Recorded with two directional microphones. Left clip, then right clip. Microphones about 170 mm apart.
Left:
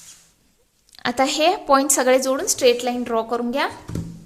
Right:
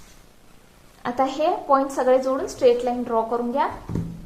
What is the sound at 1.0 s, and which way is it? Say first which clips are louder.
A woman's voice: left 3 dB; 30° left (ahead or behind).